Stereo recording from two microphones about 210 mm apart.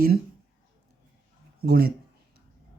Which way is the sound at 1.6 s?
45° right (ahead or behind).